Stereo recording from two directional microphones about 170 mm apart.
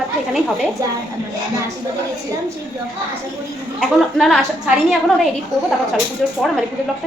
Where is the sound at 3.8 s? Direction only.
Centre (ahead or behind).